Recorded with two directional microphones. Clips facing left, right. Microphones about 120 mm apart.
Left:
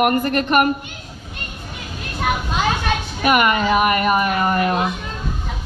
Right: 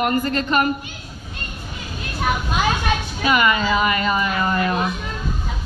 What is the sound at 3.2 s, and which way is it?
Speech, 50° left (ahead or behind).